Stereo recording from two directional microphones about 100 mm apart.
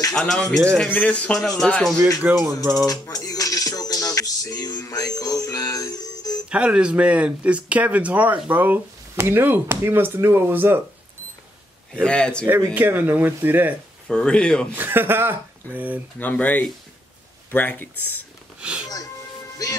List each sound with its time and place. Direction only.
0.1 s speech: 5° left (ahead or behind)
2.4 s music: 30° right (ahead or behind)
2.9 s music: 40° left (ahead or behind)
6.5 s speech: 10° right (ahead or behind)
11.9 s speech: 10° left (ahead or behind)
12.7 s speech: 20° right (ahead or behind)
14.0 s speech: 10° left (ahead or behind)
14.8 s speech: 20° right (ahead or behind)
16.2 s speech: 15° left (ahead or behind)
18.6 s a sound: 10° right (ahead or behind)